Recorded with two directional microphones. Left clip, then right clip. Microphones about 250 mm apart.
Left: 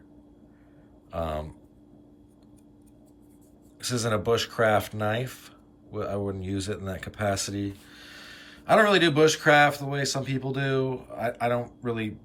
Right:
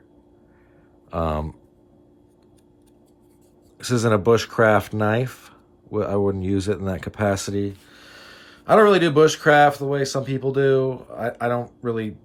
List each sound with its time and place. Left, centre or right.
1.1 s speech: centre
3.8 s speech: centre